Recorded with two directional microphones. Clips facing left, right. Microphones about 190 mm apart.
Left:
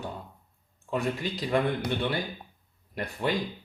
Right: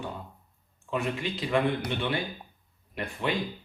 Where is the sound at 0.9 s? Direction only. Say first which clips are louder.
Left 1 dB; 35° left (ahead or behind).